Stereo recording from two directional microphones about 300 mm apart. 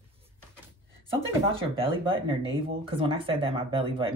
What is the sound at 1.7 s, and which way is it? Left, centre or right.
Speech, centre.